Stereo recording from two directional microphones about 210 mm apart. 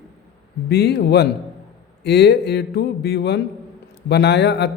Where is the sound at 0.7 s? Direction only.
50° left (ahead or behind).